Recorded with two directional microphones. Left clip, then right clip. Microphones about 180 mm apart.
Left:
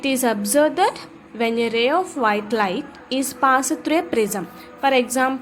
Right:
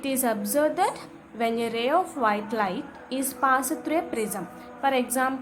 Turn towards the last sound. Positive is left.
turn(degrees=20)  # may be behind; listen again after turning